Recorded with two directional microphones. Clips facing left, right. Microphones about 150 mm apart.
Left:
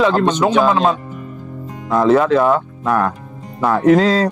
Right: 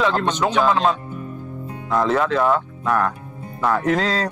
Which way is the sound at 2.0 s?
15° left (ahead or behind).